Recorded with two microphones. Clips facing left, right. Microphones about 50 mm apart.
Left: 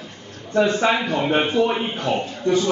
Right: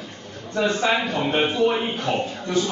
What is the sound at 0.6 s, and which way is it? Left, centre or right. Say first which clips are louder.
Speech: left 3 dB; left.